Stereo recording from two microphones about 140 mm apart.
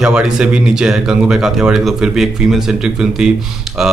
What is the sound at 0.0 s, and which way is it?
Speech, 5° right (ahead or behind).